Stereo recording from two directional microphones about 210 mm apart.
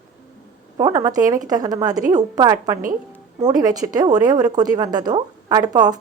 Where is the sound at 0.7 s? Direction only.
15° right (ahead or behind).